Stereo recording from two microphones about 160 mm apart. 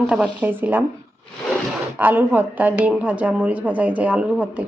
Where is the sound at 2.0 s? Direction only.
10° right (ahead or behind).